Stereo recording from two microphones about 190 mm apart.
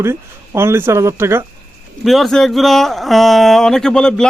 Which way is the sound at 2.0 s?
Centre (ahead or behind).